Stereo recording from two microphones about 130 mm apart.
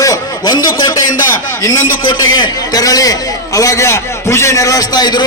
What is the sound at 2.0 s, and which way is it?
A man's voice, 35° left (ahead or behind).